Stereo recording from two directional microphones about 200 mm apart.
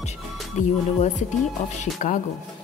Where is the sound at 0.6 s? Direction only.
35° left (ahead or behind).